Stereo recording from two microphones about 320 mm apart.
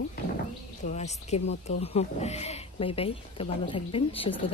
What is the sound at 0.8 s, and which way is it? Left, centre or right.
Speech, left.